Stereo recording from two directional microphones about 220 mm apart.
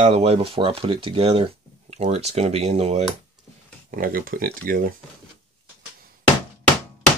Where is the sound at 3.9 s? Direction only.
40° right (ahead or behind).